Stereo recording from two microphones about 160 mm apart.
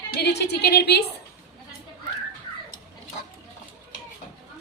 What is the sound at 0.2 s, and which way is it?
Speech, 90° left.